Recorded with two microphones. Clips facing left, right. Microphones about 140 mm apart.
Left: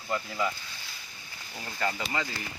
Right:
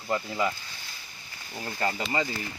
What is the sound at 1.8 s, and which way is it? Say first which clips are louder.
Speech: right 2 dB; 30° right (ahead or behind).